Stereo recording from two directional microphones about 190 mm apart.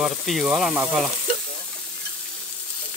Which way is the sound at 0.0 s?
Centre (ahead or behind).